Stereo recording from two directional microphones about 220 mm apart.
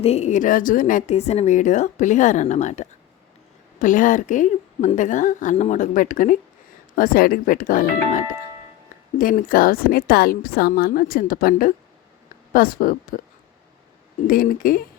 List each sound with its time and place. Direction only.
0.0 s a woman's voice: 30° left (ahead or behind)
14.3 s a woman's voice: 40° left (ahead or behind)